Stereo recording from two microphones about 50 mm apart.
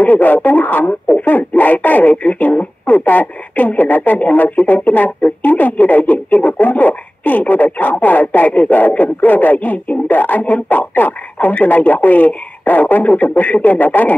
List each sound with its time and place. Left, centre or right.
0.0 s speech: left